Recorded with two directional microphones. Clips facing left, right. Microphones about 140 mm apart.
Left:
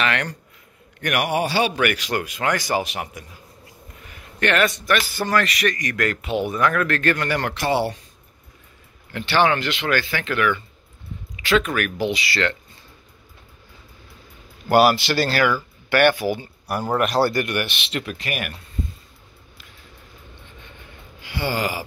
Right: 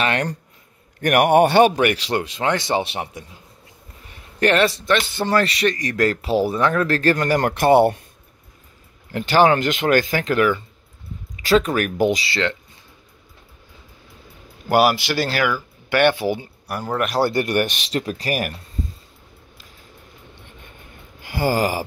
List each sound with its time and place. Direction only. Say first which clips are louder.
0.0 s a man's voice: right 2 dB; 35° right (ahead or behind)
1.0 s a man's voice: right 8 dB; 50° right (ahead or behind)
1.8 s a man's voice: right 3 dB; 30° right (ahead or behind); by 8.0 s 50° right (ahead or behind)
9.1 s a man's voice: right 4 dB; 40° right (ahead or behind)
12.3 s speech: right 1 dB; 20° right (ahead or behind)
14.7 s speech: left 1 dB; 15° right (ahead or behind)
16.0 s speech: right 1 dB; 25° right (ahead or behind)
16.6 s speech: left 2 dB; 5° left (ahead or behind)
17.2 s speech: right 3 dB; 25° right (ahead or behind)
17.5 s a man's voice: right 5 dB; 40° right (ahead or behind)
21.2 s a sound: right 5 dB; 45° right (ahead or behind)